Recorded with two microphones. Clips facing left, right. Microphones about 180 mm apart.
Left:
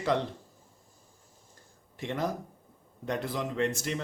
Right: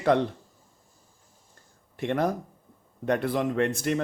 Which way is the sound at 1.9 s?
60° right (ahead or behind).